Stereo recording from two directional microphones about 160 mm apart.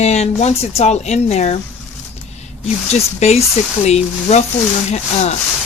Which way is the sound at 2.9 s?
45° left (ahead or behind).